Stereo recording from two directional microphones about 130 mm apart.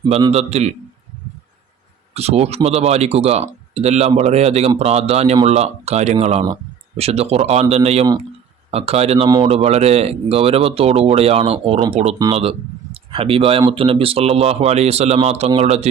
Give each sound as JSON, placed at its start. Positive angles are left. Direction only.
{"t": 0.3, "sound": "speech", "side_deg": -55}
{"t": 2.1, "sound": "speech", "side_deg": -55}